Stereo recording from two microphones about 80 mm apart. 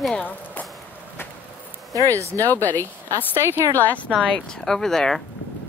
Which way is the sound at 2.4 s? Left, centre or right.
Left.